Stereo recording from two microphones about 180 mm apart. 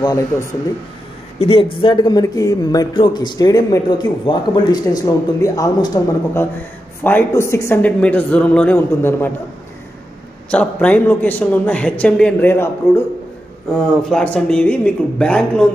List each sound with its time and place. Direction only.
0.0 s a woman's voice: 20° left (ahead or behind)
10.5 s a woman's voice: 5° left (ahead or behind)
13.7 s speech: 5° left (ahead or behind)